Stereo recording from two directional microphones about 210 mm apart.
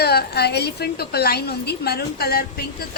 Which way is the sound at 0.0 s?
50° left (ahead or behind).